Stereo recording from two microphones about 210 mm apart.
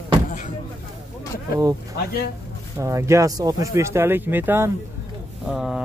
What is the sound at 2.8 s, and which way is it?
Speech, 15° right (ahead or behind).